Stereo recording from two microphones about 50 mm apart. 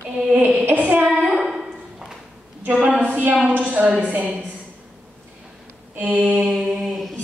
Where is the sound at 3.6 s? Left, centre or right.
Right.